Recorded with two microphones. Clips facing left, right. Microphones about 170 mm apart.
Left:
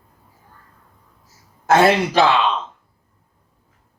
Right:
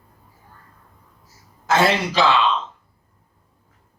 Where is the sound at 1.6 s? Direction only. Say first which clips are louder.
Left 4 dB; 55° left (ahead or behind).